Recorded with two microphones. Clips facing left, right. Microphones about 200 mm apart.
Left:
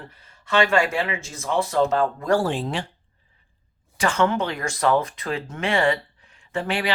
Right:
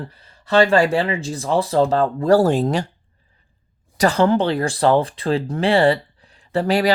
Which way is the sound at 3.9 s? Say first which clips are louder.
Right 5 dB; 35° right (ahead or behind).